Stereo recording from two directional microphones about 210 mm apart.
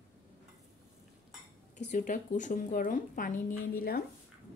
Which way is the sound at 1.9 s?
35° left (ahead or behind).